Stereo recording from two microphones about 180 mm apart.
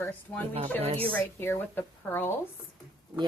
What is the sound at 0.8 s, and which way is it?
Speech, 35° right (ahead or behind).